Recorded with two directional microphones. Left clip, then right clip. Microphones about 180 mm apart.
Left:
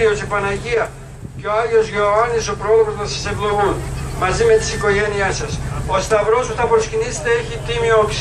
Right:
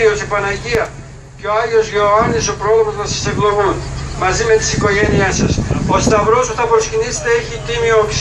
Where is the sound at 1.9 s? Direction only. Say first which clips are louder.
Right 3 dB; 40° right (ahead or behind).